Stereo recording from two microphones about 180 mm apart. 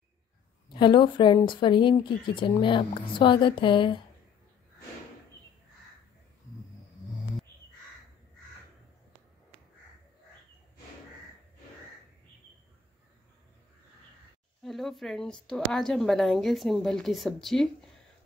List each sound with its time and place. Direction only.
0.7 s a woman's voice: 25° left (ahead or behind)
14.6 s a woman's voice: centre (ahead or behind)